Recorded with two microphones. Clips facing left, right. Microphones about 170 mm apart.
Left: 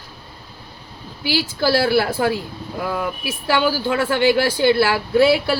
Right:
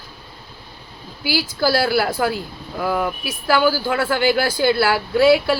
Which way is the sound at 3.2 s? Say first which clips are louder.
Even; 20° left (ahead or behind).